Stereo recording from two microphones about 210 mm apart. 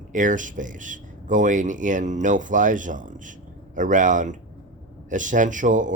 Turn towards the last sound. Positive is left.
turn(degrees=-35)  # may be behind; listen again after turning